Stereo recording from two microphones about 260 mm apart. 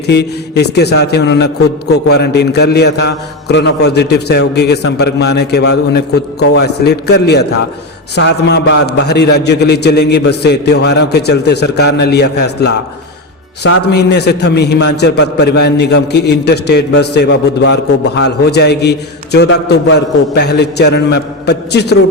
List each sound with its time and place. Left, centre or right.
0.1 s a man's voice: left